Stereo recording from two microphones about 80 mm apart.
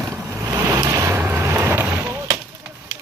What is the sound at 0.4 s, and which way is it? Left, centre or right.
Vehicle, right.